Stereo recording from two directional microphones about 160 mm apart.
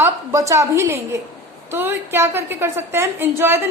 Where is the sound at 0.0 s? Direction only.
20° right (ahead or behind).